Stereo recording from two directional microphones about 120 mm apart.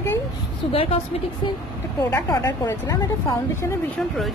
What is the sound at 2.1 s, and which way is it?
Speech, 25° left (ahead or behind).